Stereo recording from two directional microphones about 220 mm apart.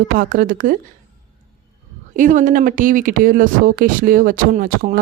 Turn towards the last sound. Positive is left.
turn(degrees=-40)  # may be behind; listen again after turning